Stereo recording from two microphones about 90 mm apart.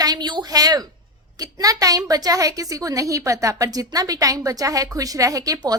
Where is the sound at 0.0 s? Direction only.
50° right (ahead or behind).